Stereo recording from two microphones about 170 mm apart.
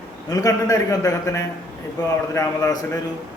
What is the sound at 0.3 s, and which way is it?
A man's voice, 20° left (ahead or behind).